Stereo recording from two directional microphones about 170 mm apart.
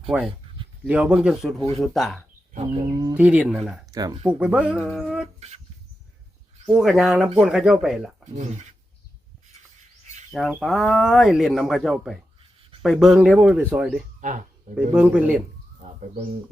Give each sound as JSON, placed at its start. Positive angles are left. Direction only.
{"t": 0.1, "sound": "speech", "side_deg": -5}
{"t": 2.7, "sound": "speech", "side_deg": -20}
{"t": 3.2, "sound": "speech", "side_deg": -10}
{"t": 3.9, "sound": "speech", "side_deg": -20}
{"t": 4.2, "sound": "speech", "side_deg": -5}
{"t": 6.7, "sound": "speech", "side_deg": 0}
{"t": 10.3, "sound": "speech", "side_deg": 0}
{"t": 14.2, "sound": "speech", "side_deg": -50}
{"t": 14.8, "sound": "speech", "side_deg": -10}